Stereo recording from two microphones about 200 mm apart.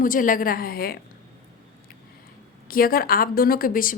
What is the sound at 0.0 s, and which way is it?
Speech, 45° left (ahead or behind).